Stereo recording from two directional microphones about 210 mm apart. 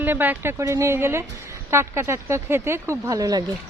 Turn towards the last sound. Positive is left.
turn(degrees=-15)  # may be behind; listen again after turning